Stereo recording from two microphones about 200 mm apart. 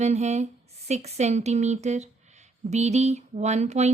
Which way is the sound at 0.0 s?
35° right (ahead or behind).